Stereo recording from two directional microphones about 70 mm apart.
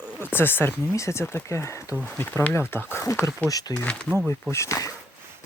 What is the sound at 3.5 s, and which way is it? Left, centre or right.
Speech, left.